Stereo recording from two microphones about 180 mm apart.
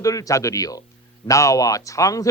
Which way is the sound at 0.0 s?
20° left (ahead or behind).